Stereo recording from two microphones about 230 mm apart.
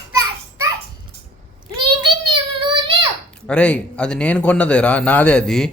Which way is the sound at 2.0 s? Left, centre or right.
Right.